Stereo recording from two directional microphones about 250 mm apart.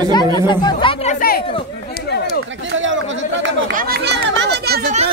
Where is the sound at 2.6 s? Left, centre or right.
Right.